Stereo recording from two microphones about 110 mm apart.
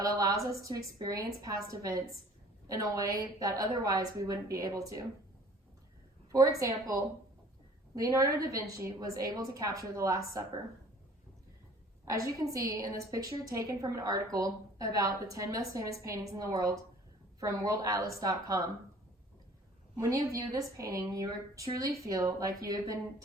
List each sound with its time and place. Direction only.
0.0 s a woman's voice: 30° right (ahead or behind)
6.3 s a woman's voice: 30° right (ahead or behind)
7.9 s a woman's voice: 30° right (ahead or behind)
12.0 s a woman's voice: 30° right (ahead or behind)
20.0 s a woman's voice: 30° right (ahead or behind)